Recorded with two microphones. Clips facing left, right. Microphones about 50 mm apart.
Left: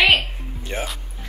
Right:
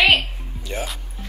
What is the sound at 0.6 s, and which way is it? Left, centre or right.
Speech, left.